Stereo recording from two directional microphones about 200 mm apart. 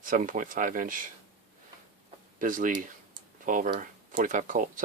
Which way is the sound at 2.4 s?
40° right (ahead or behind).